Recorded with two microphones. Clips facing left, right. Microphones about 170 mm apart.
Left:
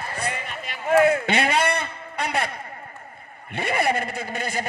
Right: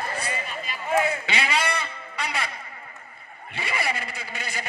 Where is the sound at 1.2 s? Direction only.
55° left (ahead or behind).